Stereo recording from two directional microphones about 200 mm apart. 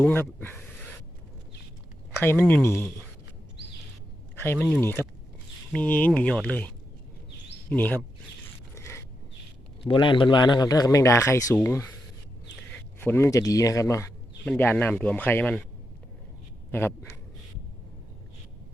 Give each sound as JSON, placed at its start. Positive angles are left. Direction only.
{"t": 0.0, "sound": "speech", "side_deg": 10}
{"t": 2.3, "sound": "speech", "side_deg": 10}
{"t": 4.4, "sound": "speech", "side_deg": 10}
{"t": 7.7, "sound": "speech", "side_deg": 10}
{"t": 8.7, "sound": "a sound", "side_deg": 15}
{"t": 9.8, "sound": "a man's voice", "side_deg": 25}
{"t": 16.7, "sound": "speech", "side_deg": 10}